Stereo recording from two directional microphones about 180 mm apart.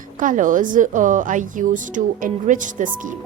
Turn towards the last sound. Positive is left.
turn(degrees=-45)  # may be behind; listen again after turning